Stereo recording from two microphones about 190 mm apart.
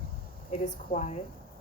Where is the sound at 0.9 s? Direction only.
45° left (ahead or behind).